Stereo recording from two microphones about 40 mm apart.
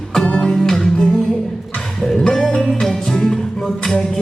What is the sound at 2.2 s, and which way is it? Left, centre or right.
Music, centre.